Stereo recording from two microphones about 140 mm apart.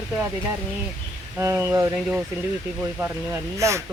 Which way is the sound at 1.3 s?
20° right (ahead or behind).